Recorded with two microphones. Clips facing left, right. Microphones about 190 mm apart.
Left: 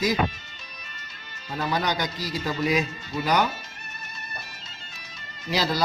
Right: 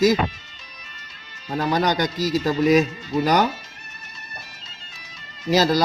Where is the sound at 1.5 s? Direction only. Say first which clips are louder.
Right 5 dB; 45° right (ahead or behind).